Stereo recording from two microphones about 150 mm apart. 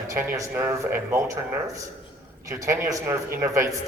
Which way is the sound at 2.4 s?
20° right (ahead or behind).